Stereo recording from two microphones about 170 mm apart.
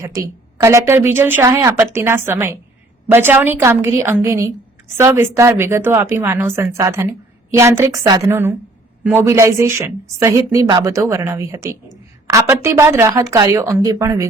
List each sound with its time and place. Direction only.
0.0 s a woman's voice: 20° right (ahead or behind)